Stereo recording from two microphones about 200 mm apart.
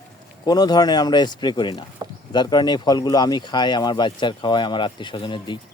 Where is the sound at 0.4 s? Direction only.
20° left (ahead or behind).